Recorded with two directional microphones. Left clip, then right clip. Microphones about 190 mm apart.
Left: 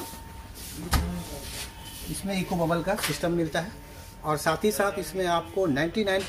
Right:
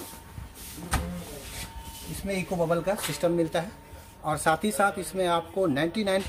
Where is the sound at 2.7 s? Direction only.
45° right (ahead or behind).